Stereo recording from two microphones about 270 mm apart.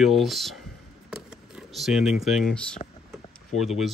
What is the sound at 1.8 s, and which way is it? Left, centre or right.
Speech, centre.